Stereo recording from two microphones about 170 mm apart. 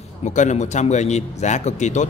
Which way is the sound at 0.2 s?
45° left (ahead or behind).